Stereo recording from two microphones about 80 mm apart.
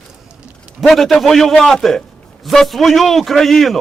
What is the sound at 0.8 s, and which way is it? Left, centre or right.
A man's voice, centre.